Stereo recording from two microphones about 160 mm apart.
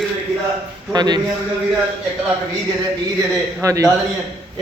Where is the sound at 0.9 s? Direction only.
25° right (ahead or behind).